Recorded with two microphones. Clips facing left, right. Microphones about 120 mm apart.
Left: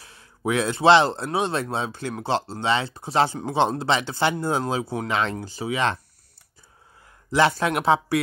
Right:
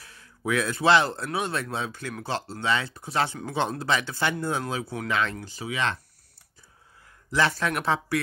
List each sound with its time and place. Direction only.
0.0 s speech: 30° left (ahead or behind)
7.2 s speech: 30° left (ahead or behind)